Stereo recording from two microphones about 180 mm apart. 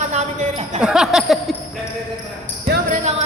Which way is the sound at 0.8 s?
5° right (ahead or behind).